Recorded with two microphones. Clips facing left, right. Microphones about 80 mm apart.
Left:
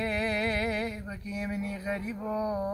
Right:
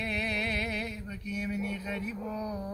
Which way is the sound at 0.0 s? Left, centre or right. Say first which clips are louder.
Left 4 dB; left.